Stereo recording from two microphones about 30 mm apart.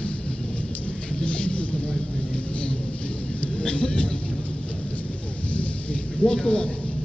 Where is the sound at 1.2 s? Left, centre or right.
Left.